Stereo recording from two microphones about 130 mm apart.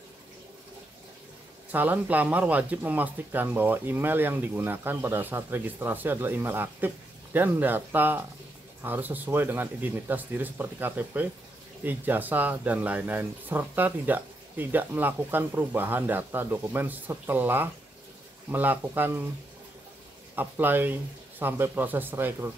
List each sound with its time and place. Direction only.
1.7 s speech: 15° right (ahead or behind)
20.3 s speech: 15° right (ahead or behind)